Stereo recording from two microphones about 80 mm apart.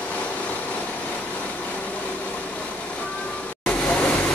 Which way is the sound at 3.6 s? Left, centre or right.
Centre.